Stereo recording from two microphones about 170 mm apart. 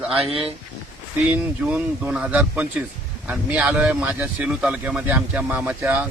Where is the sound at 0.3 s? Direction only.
35° right (ahead or behind).